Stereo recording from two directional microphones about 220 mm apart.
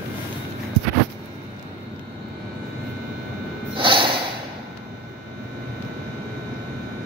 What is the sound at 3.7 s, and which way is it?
Snort, 20° right (ahead or behind).